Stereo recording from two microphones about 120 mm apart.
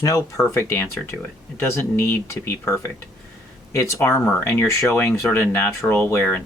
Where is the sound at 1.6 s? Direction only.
20° left (ahead or behind).